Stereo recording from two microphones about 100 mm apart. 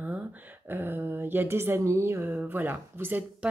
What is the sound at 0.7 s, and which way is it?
A woman's voice, 20° right (ahead or behind).